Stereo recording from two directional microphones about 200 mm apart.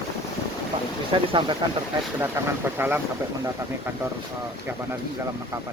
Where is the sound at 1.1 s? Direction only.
25° right (ahead or behind).